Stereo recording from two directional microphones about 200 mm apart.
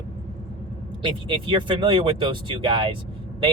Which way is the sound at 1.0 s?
25° right (ahead or behind).